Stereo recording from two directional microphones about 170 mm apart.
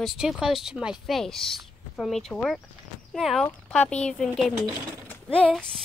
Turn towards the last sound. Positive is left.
turn(degrees=5)  # may be behind; listen again after turning